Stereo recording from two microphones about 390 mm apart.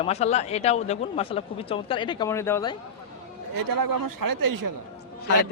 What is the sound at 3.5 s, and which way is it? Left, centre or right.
A man's voice, right.